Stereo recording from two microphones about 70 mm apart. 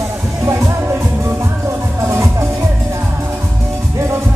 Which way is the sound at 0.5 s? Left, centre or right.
Right.